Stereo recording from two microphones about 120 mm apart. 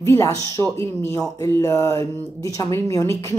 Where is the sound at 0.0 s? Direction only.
25° left (ahead or behind).